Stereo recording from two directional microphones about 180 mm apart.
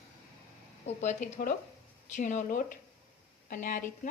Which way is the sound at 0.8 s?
40° left (ahead or behind).